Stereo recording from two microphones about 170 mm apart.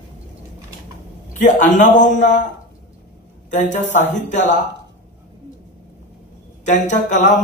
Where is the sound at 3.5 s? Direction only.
45° left (ahead or behind).